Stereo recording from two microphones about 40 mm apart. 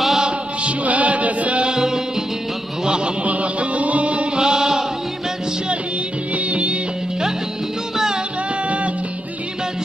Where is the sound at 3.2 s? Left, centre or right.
Right.